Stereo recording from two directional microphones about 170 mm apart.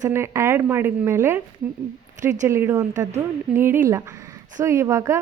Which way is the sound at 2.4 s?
15° right (ahead or behind).